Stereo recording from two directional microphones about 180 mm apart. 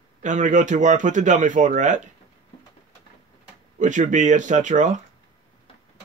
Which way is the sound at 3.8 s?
45° right (ahead or behind).